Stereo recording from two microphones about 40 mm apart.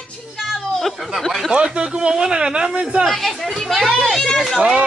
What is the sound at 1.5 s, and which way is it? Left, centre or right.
Speech, right.